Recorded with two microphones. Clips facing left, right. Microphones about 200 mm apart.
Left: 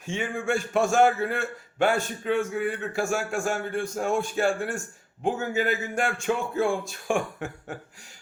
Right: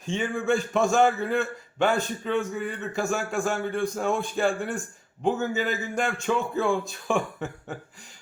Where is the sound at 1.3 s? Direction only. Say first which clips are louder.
Right 4 dB; 45° left (ahead or behind).